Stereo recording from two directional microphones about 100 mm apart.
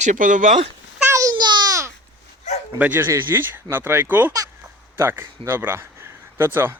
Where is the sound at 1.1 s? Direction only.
30° right (ahead or behind).